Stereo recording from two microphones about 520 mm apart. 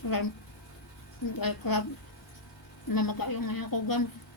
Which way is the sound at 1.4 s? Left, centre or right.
Left.